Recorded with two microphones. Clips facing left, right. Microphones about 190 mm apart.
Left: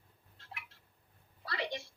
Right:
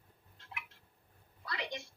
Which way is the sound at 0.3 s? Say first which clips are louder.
Right 2 dB; 30° left (ahead or behind).